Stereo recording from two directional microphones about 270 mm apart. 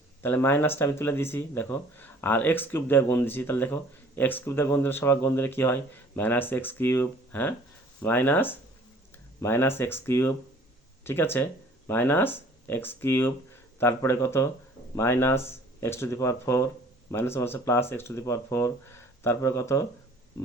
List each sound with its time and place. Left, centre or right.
0.2 s speech: centre